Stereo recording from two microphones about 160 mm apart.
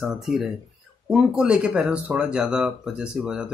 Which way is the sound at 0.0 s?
5° right (ahead or behind).